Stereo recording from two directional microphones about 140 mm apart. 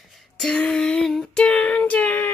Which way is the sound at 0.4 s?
5° left (ahead or behind).